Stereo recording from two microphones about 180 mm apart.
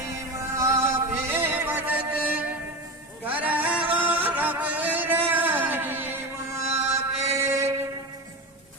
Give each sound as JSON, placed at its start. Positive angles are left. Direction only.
{"t": 0.0, "sound": "music", "side_deg": -15}
{"t": 6.7, "sound": "mantra", "side_deg": -35}
{"t": 7.3, "sound": "train", "side_deg": -15}